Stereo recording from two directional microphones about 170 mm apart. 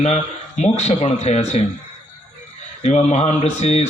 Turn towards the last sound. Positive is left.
turn(degrees=40)  # may be behind; listen again after turning